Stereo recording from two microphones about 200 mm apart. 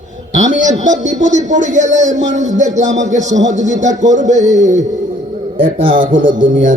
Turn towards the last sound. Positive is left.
turn(degrees=-40)  # may be behind; listen again after turning